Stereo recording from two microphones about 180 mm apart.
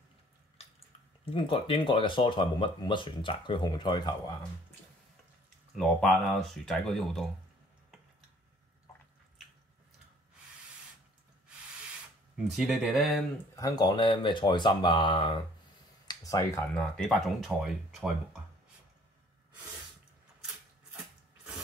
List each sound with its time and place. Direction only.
1.3 s speech: 30° left (ahead or behind)
5.8 s speech: centre (ahead or behind)
12.4 s speech: centre (ahead or behind)
13.6 s speech: 20° left (ahead or behind)
16.7 s speech: centre (ahead or behind)